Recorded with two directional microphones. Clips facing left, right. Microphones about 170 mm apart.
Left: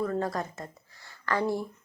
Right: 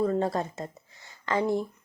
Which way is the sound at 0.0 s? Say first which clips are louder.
Right 4 dB; 25° right (ahead or behind).